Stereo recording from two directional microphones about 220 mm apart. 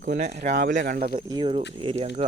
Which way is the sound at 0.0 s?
35° right (ahead or behind).